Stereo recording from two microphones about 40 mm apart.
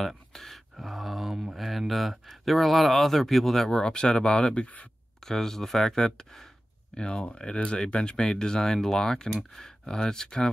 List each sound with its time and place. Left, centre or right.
0.3 s speech: centre
0.7 s speech: centre
3.6 s speech: centre
5.2 s speech: centre